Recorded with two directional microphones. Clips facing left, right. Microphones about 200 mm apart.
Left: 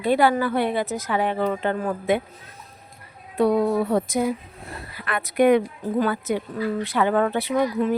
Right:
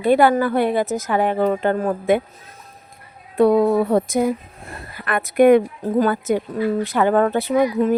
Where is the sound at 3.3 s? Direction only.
55° right (ahead or behind).